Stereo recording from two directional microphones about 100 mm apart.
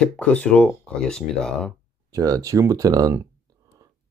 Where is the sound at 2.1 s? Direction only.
35° right (ahead or behind).